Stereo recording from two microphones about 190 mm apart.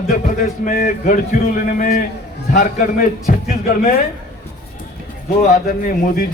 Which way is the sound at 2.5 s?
45° left (ahead or behind).